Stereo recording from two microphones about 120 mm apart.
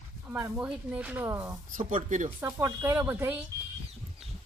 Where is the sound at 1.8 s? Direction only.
90° right.